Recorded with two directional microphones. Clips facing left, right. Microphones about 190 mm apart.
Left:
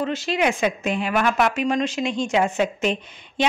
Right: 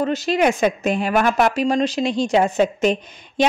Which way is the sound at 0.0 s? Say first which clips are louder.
Right 4 dB; 40° right (ahead or behind).